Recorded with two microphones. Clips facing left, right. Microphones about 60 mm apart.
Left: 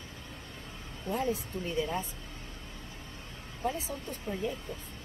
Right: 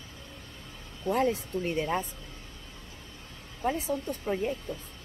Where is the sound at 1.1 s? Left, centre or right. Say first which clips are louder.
Right 5 dB; right.